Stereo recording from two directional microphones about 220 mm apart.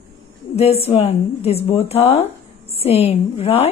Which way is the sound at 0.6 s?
30° left (ahead or behind).